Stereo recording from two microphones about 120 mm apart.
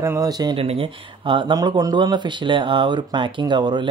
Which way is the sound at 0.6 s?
50° right (ahead or behind).